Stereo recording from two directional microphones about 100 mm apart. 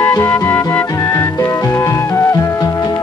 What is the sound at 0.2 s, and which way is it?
Music, 20° left (ahead or behind).